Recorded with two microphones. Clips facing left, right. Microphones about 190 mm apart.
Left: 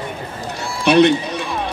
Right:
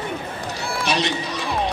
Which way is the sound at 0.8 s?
60° left (ahead or behind).